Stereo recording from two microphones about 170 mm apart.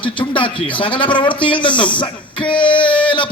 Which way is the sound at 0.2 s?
30° left (ahead or behind).